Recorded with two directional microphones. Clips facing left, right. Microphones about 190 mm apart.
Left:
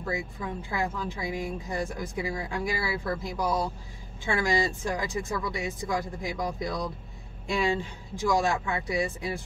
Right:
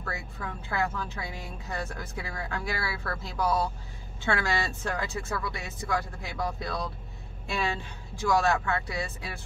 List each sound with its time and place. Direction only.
0.0 s speech: 15° left (ahead or behind)